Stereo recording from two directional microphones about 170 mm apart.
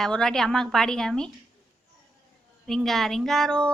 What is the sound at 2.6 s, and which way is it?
A woman's voice, centre (ahead or behind).